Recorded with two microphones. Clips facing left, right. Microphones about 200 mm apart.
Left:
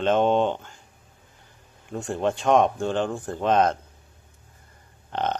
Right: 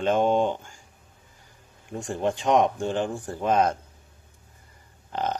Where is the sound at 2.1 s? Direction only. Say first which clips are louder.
Left 1 dB; 60° left (ahead or behind).